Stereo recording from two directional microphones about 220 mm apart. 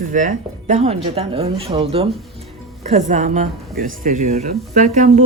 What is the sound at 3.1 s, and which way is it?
Speech, 35° right (ahead or behind).